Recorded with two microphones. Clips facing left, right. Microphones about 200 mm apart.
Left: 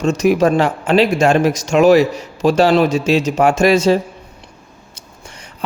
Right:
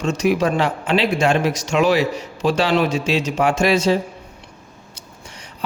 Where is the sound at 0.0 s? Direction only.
45° left (ahead or behind).